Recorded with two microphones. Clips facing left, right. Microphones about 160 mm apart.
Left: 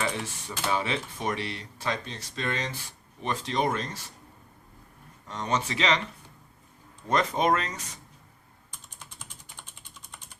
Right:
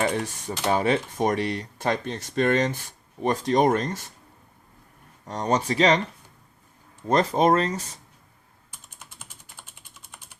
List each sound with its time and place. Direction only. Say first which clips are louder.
0.0 s speech: right 6 dB; 45° right (ahead or behind)
5.2 s speech: right 5 dB; 40° right (ahead or behind)
7.1 s speech: right 5 dB; 35° right (ahead or behind)
8.7 s typing: even; 5° right (ahead or behind)